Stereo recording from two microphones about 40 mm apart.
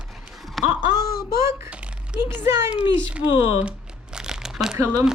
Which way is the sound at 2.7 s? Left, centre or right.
Right.